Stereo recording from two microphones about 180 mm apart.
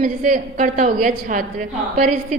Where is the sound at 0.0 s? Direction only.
45° right (ahead or behind).